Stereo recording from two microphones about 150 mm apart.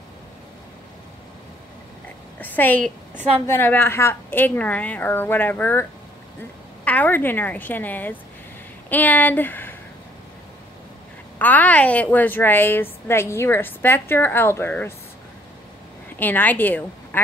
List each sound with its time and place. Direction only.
2.4 s a woman's voice: 10° left (ahead or behind)
3.2 s a woman's voice: 40° right (ahead or behind)
3.4 s a woman's voice: 15° left (ahead or behind)
11.3 s a woman's voice: 10° left (ahead or behind)
16.2 s a woman's voice: 10° left (ahead or behind)